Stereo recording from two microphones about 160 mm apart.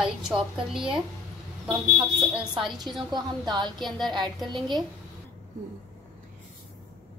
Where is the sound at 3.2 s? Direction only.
25° right (ahead or behind).